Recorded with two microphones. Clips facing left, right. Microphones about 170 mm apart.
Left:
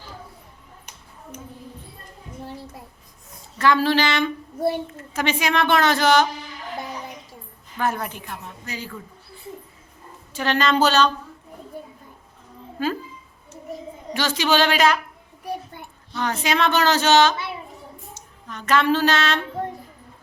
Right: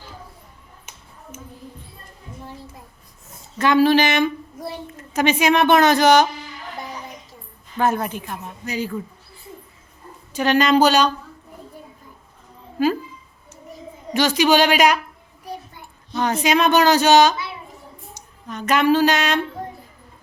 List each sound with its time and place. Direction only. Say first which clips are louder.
3.6 s a woman's voice: right 4 dB; 20° right (ahead or behind)
7.8 s a woman's voice: right 5 dB; 25° right (ahead or behind)
10.3 s a woman's voice: right 4 dB; 15° right (ahead or behind)
14.1 s a woman's voice: right 5 dB; 15° right (ahead or behind)
16.1 s a woman's voice: right 4 dB; 20° right (ahead or behind)